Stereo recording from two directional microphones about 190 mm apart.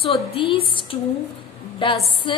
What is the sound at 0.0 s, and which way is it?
A woman's voice, 30° left (ahead or behind).